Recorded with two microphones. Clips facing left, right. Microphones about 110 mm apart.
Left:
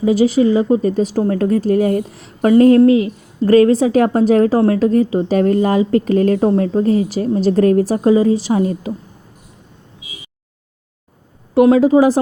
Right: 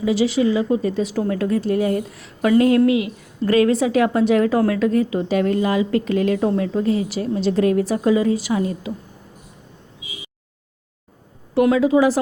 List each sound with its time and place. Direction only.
0.0 s a woman's voice: 45° left (ahead or behind)
11.6 s a woman's voice: 35° left (ahead or behind)